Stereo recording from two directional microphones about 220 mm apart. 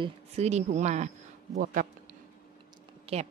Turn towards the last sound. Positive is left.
turn(degrees=-25)  # may be behind; listen again after turning